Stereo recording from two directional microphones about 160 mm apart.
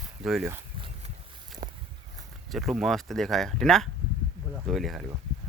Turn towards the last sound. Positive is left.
turn(degrees=0)  # may be behind; listen again after turning